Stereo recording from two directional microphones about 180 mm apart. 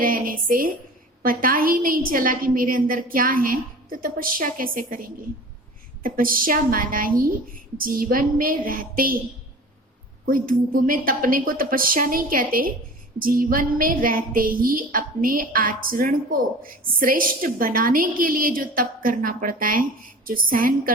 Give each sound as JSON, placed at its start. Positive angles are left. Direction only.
{"t": 0.0, "sound": "a woman's voice", "side_deg": -50}
{"t": 10.2, "sound": "a woman's voice", "side_deg": -50}